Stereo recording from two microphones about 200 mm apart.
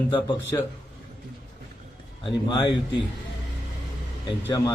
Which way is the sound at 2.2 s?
25° left (ahead or behind).